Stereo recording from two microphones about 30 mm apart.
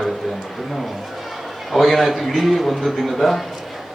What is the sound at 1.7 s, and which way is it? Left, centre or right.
A man's voice, centre.